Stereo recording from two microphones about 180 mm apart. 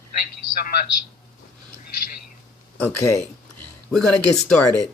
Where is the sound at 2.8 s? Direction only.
15° left (ahead or behind).